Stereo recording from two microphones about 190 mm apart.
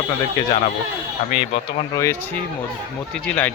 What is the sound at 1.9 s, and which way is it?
Speech, 15° left (ahead or behind).